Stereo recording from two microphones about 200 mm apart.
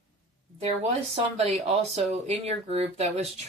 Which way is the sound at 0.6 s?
30° right (ahead or behind).